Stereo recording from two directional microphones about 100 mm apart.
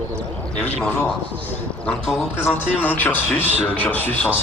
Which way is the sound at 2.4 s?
15° left (ahead or behind).